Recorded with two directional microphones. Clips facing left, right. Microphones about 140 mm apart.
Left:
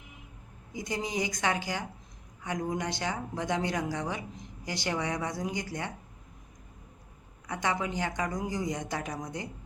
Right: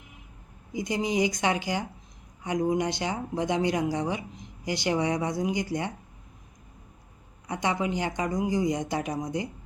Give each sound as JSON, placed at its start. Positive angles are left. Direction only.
{"t": 0.7, "sound": "speech", "side_deg": -15}
{"t": 7.4, "sound": "speech", "side_deg": -20}